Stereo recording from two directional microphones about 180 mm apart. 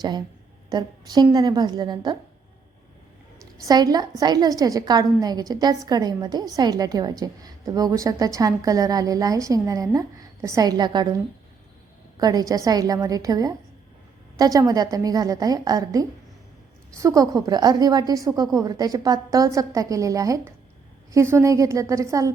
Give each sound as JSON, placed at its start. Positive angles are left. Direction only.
{"t": 0.7, "sound": "a woman's voice", "side_deg": -20}
{"t": 3.6, "sound": "a woman's voice", "side_deg": -20}
{"t": 12.2, "sound": "a woman's voice", "side_deg": -20}